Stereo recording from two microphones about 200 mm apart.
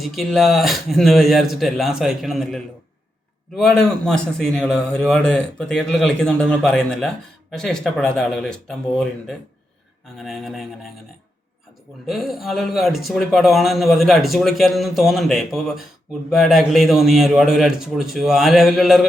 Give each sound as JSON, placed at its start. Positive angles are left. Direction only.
{"t": 0.0, "sound": "speech", "side_deg": 0}
{"t": 10.2, "sound": "speech", "side_deg": 0}
{"t": 12.0, "sound": "speech", "side_deg": 0}